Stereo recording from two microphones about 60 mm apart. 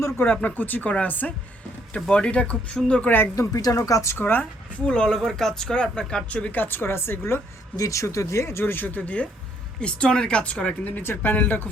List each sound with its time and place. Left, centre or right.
0.2 s speech: left
2.0 s speech: centre
3.3 s speech: left
4.1 s speech: left
4.9 s speech: centre
6.3 s speech: left
7.8 s speech: left; by 10.8 s centre
10.8 s speech: left